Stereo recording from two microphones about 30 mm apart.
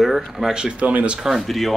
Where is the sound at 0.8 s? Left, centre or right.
Right.